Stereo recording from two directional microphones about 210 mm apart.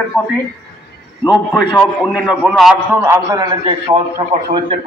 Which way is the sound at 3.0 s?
15° right (ahead or behind).